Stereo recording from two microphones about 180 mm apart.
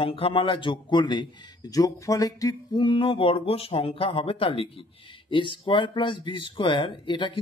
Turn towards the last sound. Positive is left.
turn(degrees=25)  # may be behind; listen again after turning